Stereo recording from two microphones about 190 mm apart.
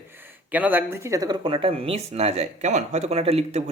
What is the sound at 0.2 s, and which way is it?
Speech, 10° right (ahead or behind).